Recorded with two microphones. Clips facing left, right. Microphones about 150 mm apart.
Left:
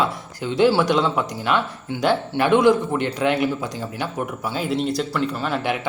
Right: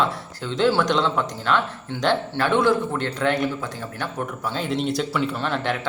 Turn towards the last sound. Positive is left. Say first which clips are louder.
# left 1 dB
turn(degrees=10)  # may be behind; listen again after turning